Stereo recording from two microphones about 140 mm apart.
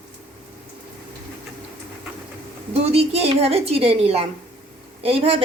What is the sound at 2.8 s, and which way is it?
A woman's voice, 45° right (ahead or behind).